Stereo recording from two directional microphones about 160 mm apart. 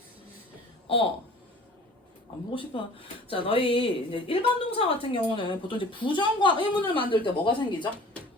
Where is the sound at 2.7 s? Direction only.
30° left (ahead or behind).